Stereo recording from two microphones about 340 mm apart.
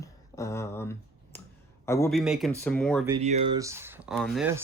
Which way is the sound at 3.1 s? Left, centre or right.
Centre.